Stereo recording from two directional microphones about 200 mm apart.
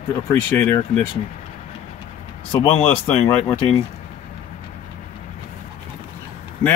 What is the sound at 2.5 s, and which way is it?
Speech, 30° left (ahead or behind).